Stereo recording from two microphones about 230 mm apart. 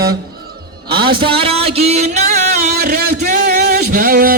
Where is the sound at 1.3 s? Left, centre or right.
Right.